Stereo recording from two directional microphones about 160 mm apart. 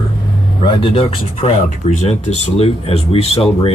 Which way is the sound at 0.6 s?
35° left (ahead or behind).